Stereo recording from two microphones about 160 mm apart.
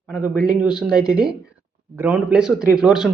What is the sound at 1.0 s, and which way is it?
Speech, 5° right (ahead or behind).